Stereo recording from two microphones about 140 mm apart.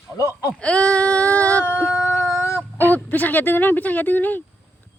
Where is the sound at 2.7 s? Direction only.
15° left (ahead or behind).